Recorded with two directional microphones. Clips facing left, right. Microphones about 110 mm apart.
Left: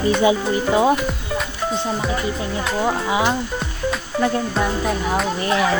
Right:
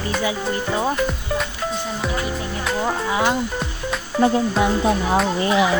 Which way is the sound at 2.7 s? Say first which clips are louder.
Left 2 dB; 10° left (ahead or behind).